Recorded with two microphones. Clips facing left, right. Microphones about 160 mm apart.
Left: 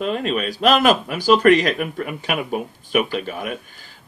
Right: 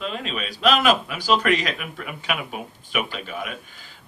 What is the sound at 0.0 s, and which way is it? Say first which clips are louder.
A man's voice: left 8 dB; 45° left (ahead or behind).